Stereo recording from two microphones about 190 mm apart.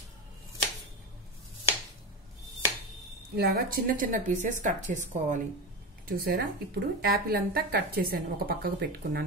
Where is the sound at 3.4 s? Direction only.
50° right (ahead or behind).